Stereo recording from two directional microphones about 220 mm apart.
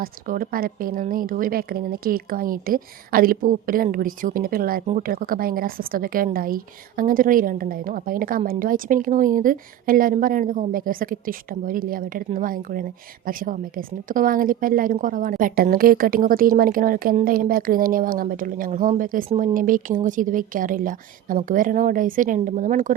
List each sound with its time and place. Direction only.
0.0 s a woman's voice: 40° right (ahead or behind)